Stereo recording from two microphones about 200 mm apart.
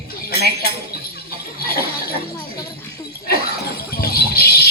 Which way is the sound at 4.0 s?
50° left (ahead or behind).